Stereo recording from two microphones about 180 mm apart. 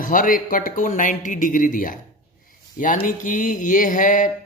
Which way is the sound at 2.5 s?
50° left (ahead or behind).